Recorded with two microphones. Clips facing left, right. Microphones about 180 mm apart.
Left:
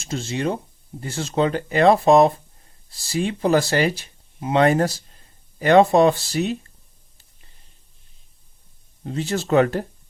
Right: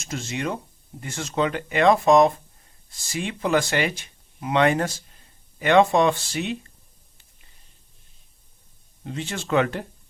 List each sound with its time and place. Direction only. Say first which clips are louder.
0.0 s speech: left 4 dB; 30° left (ahead or behind)
9.0 s speech: left 5 dB; 35° left (ahead or behind)